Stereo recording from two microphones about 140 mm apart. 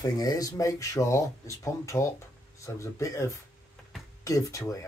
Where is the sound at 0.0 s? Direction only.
25° left (ahead or behind).